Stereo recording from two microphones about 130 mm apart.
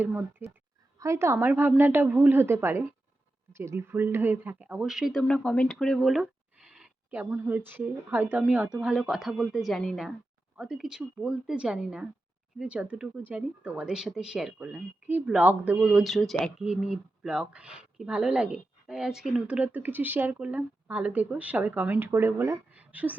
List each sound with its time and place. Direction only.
0.0 s speech: 15° right (ahead or behind)